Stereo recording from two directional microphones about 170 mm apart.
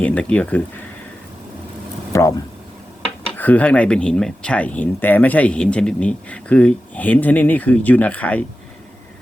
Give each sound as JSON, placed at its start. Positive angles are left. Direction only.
{"t": 0.0, "sound": "speech", "side_deg": 10}
{"t": 2.1, "sound": "speech", "side_deg": 20}
{"t": 3.3, "sound": "speech", "side_deg": 10}